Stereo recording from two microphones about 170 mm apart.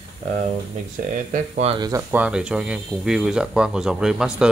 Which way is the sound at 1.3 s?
40° right (ahead or behind).